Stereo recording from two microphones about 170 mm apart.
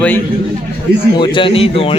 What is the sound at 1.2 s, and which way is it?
Speech, 30° left (ahead or behind).